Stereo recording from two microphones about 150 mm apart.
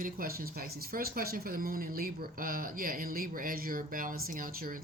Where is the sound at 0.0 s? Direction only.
75° right (ahead or behind).